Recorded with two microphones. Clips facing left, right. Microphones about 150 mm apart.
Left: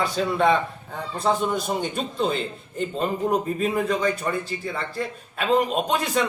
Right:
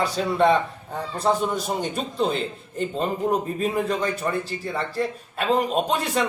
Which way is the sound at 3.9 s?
35° right (ahead or behind).